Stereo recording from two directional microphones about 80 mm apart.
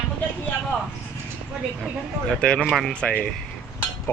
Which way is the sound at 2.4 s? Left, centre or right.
Centre.